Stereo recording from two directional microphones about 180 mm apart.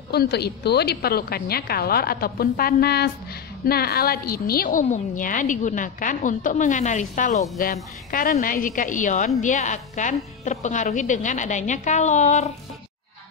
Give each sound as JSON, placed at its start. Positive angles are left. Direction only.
{"t": 0.1, "sound": "a woman's voice", "side_deg": 65}